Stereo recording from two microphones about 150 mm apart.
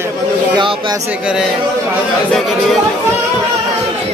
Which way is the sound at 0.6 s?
30° right (ahead or behind).